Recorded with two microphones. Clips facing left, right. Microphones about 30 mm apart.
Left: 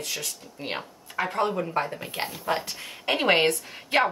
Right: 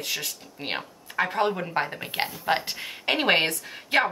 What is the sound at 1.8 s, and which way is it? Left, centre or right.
Speech, right.